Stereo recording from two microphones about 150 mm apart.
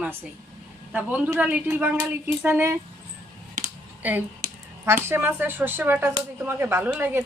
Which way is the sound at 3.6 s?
55° right (ahead or behind).